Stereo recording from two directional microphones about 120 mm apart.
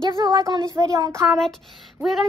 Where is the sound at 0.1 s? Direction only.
35° right (ahead or behind).